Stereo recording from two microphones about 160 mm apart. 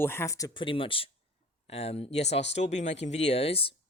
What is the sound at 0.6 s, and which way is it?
Speech, 35° left (ahead or behind).